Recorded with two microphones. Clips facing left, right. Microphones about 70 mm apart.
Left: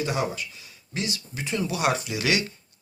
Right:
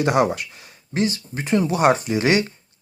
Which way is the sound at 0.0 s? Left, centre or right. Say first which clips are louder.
Right 9 dB; right.